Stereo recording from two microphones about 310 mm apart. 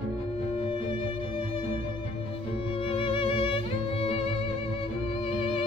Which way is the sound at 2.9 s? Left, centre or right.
Centre.